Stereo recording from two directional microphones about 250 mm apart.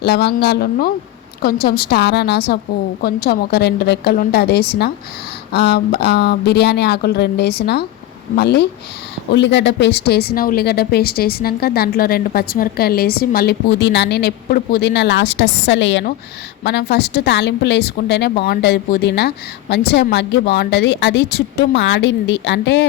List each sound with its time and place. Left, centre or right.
0.0 s a woman's voice: left